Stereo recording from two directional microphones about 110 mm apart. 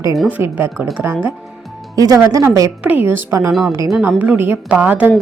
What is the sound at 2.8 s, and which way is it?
Speech, 15° right (ahead or behind).